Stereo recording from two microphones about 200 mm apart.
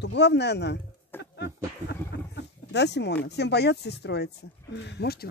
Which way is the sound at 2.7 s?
60° left (ahead or behind).